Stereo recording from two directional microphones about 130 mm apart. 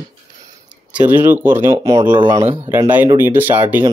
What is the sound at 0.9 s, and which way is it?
Speech, 15° right (ahead or behind).